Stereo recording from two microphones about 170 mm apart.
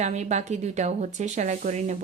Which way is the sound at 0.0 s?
40° right (ahead or behind).